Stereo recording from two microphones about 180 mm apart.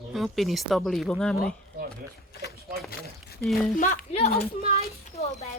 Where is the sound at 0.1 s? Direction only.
Centre (ahead or behind).